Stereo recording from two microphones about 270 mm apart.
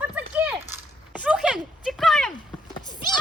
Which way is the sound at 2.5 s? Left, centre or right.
Centre.